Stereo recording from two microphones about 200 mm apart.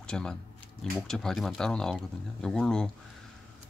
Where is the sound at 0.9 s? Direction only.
Centre (ahead or behind).